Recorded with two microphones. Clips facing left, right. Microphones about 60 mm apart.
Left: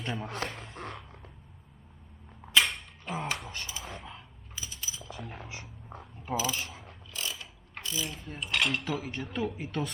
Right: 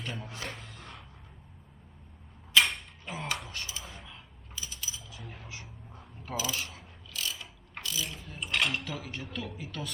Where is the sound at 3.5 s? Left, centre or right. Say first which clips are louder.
Left 1 dB; left.